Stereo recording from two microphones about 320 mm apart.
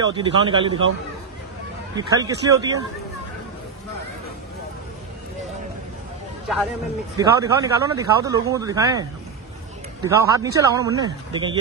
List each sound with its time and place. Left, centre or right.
0.0 s speech: centre
2.0 s speech: centre
7.2 s speech: centre
10.0 s speech: centre